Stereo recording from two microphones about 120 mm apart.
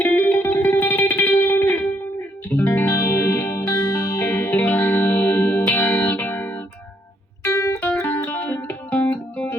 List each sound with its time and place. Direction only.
0.0 s music: 15° left (ahead or behind)